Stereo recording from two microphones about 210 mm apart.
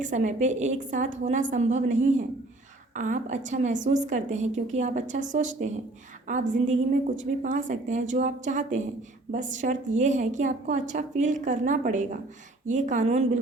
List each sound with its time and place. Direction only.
0.0 s a woman's voice: 35° right (ahead or behind)